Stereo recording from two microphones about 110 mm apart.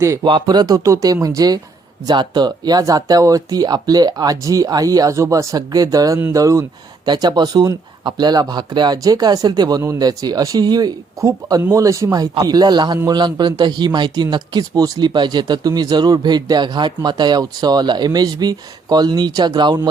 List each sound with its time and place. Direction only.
0.0 s speech: 25° right (ahead or behind)
0.3 s speech: 45° right (ahead or behind)